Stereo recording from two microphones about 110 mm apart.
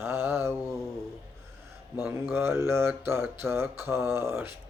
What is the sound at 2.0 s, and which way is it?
Mantra, 20° right (ahead or behind).